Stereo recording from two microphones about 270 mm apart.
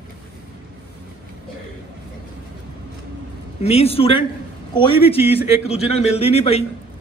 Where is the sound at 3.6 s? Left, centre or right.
Left.